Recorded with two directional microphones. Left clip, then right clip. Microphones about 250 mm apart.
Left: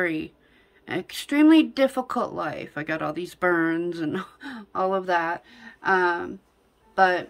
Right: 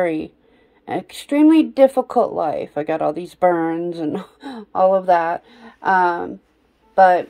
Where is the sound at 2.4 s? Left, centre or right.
Centre.